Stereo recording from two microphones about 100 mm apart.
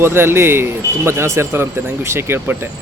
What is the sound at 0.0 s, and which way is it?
Speech, 25° right (ahead or behind).